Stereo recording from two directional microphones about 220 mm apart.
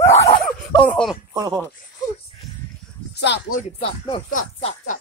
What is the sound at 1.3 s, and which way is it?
Speech, 15° right (ahead or behind).